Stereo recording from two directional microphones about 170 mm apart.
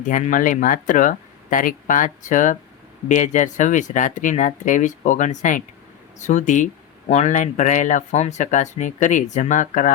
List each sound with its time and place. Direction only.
0.0 s speech: 50° left (ahead or behind)